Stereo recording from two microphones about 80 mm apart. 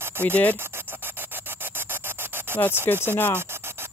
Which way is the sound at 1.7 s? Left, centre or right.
Right.